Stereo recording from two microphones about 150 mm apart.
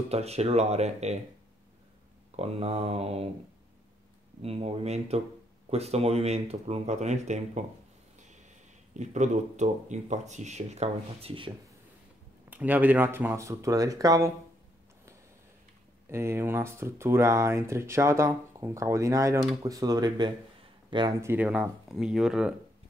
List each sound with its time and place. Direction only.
0.1 s speech: 45° right (ahead or behind)
2.3 s speech: 40° right (ahead or behind)
4.4 s speech: 40° right (ahead or behind)
8.9 s speech: 50° right (ahead or behind)
12.4 s speech: 10° right (ahead or behind)
16.1 s speech: 15° right (ahead or behind)
21.2 s speech: 15° right (ahead or behind)